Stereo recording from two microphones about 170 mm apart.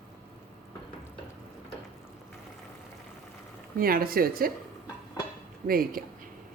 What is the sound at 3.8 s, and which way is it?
Speech, 60° right (ahead or behind).